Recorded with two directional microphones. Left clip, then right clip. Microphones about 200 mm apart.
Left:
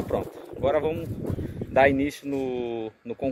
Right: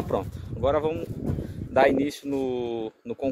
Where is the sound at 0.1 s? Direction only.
15° right (ahead or behind).